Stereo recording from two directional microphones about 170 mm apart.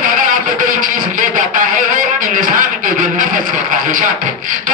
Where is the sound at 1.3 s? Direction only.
50° right (ahead or behind).